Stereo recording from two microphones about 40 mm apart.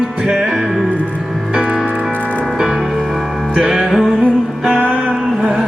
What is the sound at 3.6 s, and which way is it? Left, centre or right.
Music, centre.